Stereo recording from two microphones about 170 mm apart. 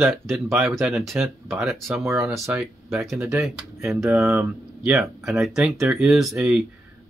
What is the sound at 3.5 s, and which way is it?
Speech, 5° right (ahead or behind).